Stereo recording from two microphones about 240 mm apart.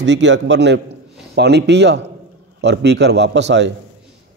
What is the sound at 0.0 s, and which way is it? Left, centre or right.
A man's voice, right.